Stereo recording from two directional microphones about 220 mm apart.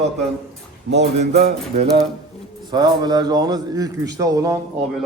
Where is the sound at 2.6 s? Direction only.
20° right (ahead or behind).